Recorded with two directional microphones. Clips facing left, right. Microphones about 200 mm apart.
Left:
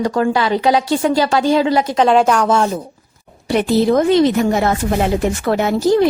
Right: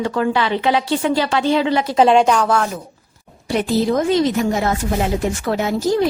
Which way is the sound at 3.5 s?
65° left (ahead or behind).